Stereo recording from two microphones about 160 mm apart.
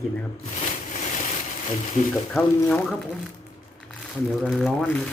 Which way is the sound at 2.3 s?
10° left (ahead or behind).